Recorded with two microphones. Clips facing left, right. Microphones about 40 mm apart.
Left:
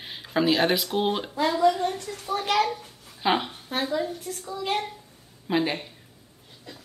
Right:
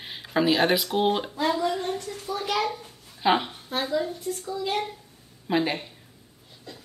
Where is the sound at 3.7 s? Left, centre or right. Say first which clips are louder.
Even; left.